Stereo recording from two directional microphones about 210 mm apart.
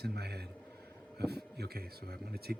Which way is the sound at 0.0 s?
50° right (ahead or behind).